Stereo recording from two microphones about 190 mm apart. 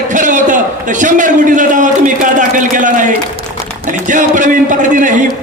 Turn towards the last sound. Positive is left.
turn(degrees=-40)  # may be behind; listen again after turning